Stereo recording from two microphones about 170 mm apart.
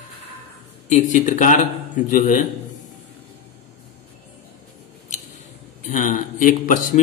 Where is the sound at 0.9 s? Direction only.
45° left (ahead or behind).